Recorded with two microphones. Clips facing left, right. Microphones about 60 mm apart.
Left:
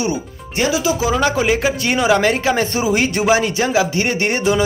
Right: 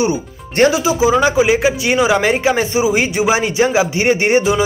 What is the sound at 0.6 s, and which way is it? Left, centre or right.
Speech, right.